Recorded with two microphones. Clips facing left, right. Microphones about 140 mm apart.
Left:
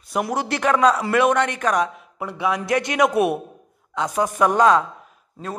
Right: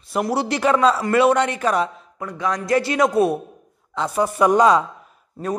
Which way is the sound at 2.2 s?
10° left (ahead or behind).